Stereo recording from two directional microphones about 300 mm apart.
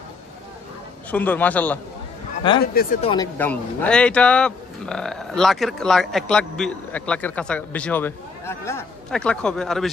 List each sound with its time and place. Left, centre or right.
1.1 s speech: centre
2.6 s speech: left
3.1 s speech: centre